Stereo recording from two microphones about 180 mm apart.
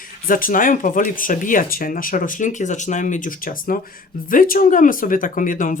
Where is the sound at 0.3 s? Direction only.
50° left (ahead or behind).